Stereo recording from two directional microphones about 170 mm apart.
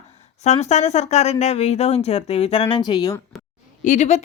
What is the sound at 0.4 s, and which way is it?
Speech, 40° left (ahead or behind).